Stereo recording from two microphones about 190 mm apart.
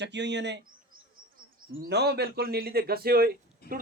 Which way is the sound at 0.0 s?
65° right (ahead or behind).